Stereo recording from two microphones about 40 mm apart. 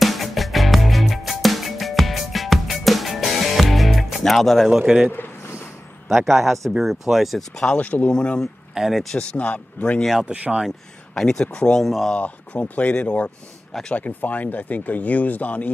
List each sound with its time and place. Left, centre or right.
0.0 s music: centre
4.2 s speech: centre
4.6 s a man's voice: centre
6.0 s a man's voice: centre
7.6 s speech: left
8.1 s a man's voice: left
8.7 s speech: centre
9.2 s a man's voice: left
10.2 s speech: right
11.3 s a man's voice: left
11.8 s speech: centre
12.2 s speech: left